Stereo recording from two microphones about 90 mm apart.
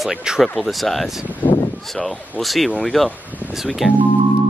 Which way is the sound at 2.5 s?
Centre (ahead or behind).